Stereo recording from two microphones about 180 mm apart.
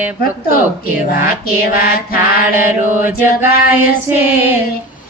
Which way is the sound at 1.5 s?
55° left (ahead or behind).